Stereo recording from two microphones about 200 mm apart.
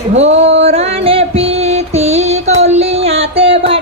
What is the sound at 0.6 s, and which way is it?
Music, 30° right (ahead or behind).